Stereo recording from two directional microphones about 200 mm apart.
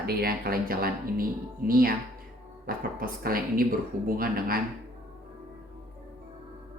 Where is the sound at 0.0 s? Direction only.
50° right (ahead or behind).